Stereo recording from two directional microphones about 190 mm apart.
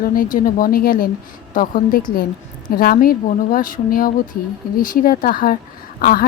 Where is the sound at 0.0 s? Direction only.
45° left (ahead or behind).